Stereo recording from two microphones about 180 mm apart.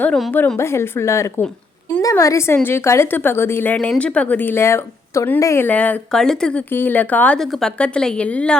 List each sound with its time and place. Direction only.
0.0 s a woman's voice: 5° left (ahead or behind)